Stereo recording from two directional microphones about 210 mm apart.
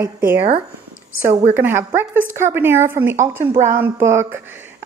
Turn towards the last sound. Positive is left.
turn(degrees=-10)  # may be behind; listen again after turning